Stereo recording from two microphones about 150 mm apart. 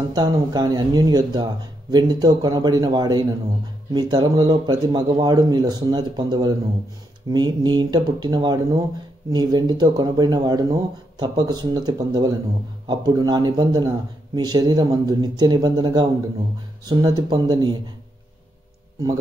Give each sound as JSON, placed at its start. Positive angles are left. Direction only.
{"t": 0.1, "sound": "speech", "side_deg": -30}